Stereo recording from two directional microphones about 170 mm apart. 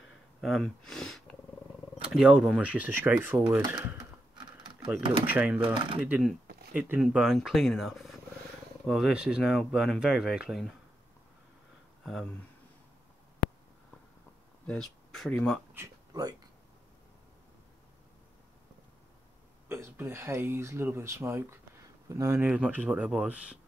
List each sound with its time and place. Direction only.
0.4 s speech: centre (ahead or behind)
5.2 s speech: 10° right (ahead or behind)
12.0 s speech: centre (ahead or behind)
14.7 s speech: 5° left (ahead or behind)
15.7 s a sound: 20° right (ahead or behind)
19.7 s speech: 15° right (ahead or behind)